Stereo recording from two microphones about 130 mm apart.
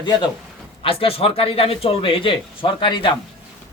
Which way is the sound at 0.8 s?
45° left (ahead or behind).